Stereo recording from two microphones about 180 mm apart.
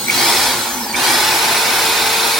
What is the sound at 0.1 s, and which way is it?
Drill, centre (ahead or behind).